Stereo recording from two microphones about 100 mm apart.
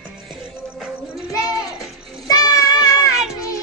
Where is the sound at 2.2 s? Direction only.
35° left (ahead or behind).